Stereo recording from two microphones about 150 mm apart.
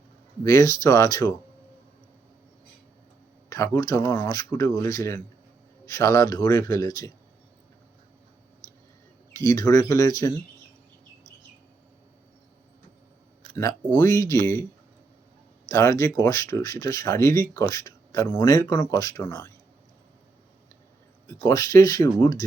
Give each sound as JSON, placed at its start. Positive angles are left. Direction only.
{"t": 0.4, "sound": "speech", "side_deg": 20}
{"t": 3.5, "sound": "speech", "side_deg": 20}
{"t": 9.4, "sound": "speech", "side_deg": 20}
{"t": 13.9, "sound": "speech", "side_deg": 20}
{"t": 15.7, "sound": "speech", "side_deg": 20}
{"t": 21.4, "sound": "speech", "side_deg": 25}